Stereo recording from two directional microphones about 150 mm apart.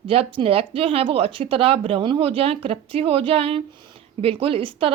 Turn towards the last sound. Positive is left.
turn(degrees=-35)  # may be behind; listen again after turning